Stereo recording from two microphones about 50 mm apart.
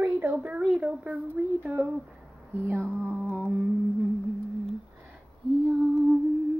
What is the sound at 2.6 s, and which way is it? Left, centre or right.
Speech, right.